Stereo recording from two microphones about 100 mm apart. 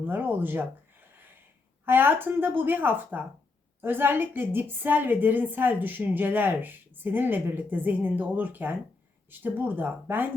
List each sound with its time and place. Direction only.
0.1 s a woman's voice: 20° right (ahead or behind)
1.8 s a woman's voice: 20° right (ahead or behind)